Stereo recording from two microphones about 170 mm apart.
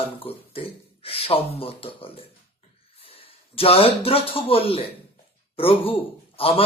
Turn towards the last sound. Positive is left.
turn(degrees=35)  # may be behind; listen again after turning